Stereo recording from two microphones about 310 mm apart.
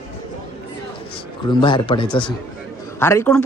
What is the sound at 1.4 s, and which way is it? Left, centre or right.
A man's voice, centre.